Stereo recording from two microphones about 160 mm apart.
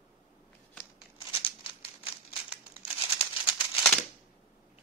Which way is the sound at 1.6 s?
35° left (ahead or behind).